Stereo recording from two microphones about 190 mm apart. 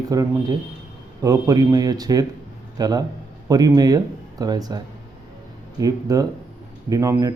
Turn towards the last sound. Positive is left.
turn(degrees=-15)  # may be behind; listen again after turning